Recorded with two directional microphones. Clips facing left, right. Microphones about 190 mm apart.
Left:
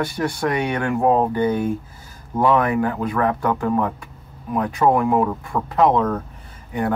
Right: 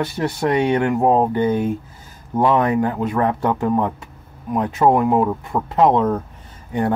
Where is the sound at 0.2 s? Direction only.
20° right (ahead or behind).